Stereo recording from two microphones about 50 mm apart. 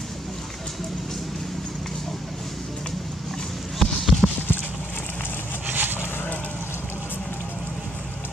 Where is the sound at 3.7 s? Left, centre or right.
Centre.